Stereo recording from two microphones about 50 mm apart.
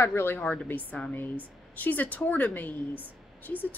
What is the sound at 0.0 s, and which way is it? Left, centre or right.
Speech, left.